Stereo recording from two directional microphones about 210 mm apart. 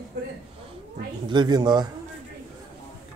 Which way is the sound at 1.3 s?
20° right (ahead or behind).